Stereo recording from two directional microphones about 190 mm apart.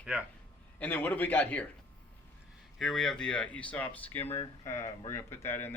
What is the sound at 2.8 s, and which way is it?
Speech, centre (ahead or behind).